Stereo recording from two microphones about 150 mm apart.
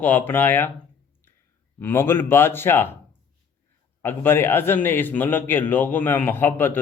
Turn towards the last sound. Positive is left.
turn(degrees=15)  # may be behind; listen again after turning